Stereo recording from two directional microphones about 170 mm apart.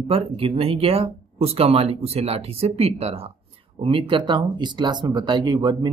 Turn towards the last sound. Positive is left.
turn(degrees=-25)  # may be behind; listen again after turning